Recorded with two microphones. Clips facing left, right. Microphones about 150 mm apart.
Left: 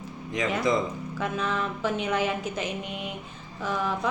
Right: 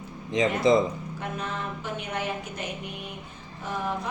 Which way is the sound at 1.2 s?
90° left.